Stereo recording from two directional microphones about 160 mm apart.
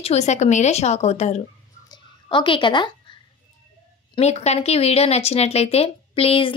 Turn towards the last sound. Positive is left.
turn(degrees=35)  # may be behind; listen again after turning